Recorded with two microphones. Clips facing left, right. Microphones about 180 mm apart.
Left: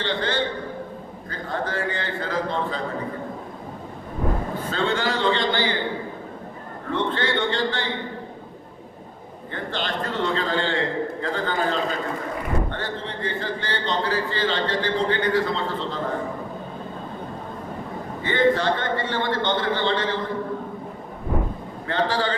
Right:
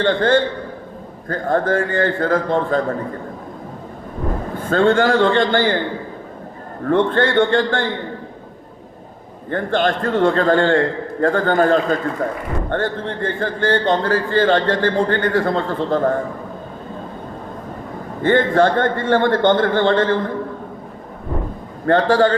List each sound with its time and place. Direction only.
0.0 s a man's voice: 50° right (ahead or behind)
4.6 s a man's voice: 50° right (ahead or behind)
6.8 s a man's voice: 50° right (ahead or behind)
9.5 s a man's voice: 50° right (ahead or behind)
18.2 s a man's voice: 50° right (ahead or behind)
21.8 s a man's voice: 50° right (ahead or behind)